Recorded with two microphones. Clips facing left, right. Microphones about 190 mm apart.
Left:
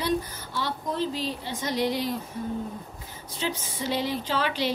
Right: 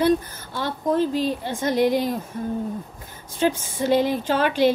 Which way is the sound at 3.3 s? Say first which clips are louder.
Right 9 dB; 50° right (ahead or behind).